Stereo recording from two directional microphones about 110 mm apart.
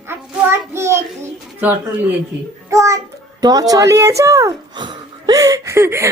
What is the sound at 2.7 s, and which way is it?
Speech, 30° right (ahead or behind).